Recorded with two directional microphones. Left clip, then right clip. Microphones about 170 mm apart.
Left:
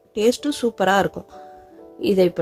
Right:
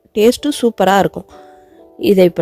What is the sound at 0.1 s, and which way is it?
A woman's voice, 45° right (ahead or behind).